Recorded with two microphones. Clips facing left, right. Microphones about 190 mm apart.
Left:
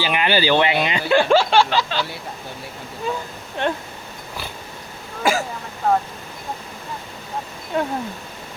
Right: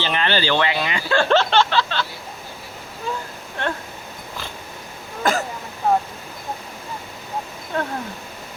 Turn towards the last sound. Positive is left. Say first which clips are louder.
# left 3 dB
turn(degrees=10)  # may be behind; listen again after turning